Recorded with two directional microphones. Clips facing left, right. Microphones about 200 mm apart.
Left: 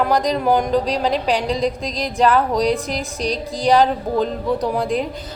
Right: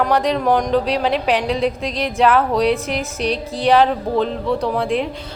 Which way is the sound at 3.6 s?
Centre (ahead or behind).